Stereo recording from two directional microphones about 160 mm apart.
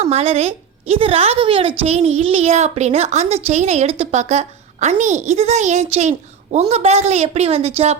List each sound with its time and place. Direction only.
0.0 s a woman's voice: 40° right (ahead or behind)